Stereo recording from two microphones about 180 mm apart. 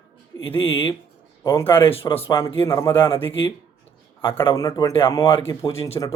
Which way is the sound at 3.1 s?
30° left (ahead or behind).